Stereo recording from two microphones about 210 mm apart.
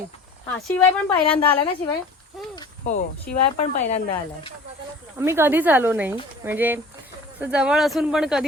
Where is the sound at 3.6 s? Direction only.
30° left (ahead or behind).